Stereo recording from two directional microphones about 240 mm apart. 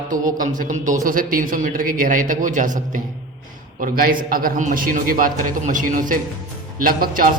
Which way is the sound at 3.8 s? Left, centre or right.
Right.